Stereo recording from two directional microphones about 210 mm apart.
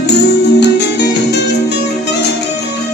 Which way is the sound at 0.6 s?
55° left (ahead or behind).